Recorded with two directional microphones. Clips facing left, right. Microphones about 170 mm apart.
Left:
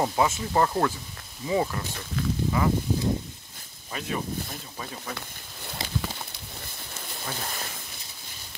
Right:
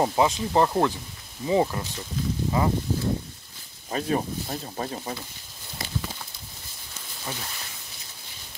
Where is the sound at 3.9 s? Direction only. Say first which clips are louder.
Right 5 dB; 40° right (ahead or behind).